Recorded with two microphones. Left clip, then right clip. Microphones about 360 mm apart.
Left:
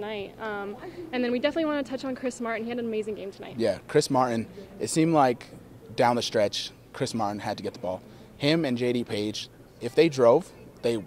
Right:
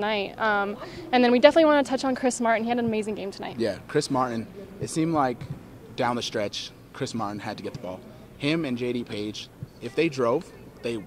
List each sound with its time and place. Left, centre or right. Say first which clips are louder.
0.0 s a woman's voice: right 8 dB; right
3.5 s a man's voice: left 3 dB; left